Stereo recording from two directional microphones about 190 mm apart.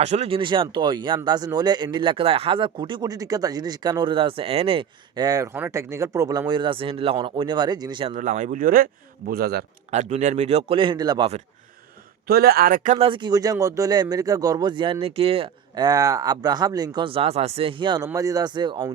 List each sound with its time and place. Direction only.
0.0 s speech: 35° right (ahead or behind)
8.1 s speech: 40° right (ahead or behind)
9.9 s a man's voice: 40° right (ahead or behind); by 11.3 s 20° right (ahead or behind)
12.3 s speech: 55° right (ahead or behind)
13.0 s speech: 25° right (ahead or behind)